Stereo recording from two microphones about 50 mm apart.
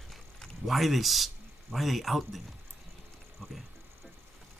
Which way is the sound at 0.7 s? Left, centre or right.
Centre.